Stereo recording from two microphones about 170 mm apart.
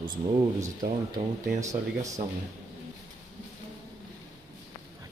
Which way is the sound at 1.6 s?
20° right (ahead or behind).